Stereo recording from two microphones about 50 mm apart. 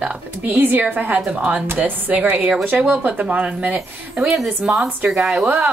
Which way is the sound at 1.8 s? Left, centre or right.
Right.